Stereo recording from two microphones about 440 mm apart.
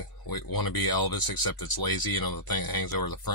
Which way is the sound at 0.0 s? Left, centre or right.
Left.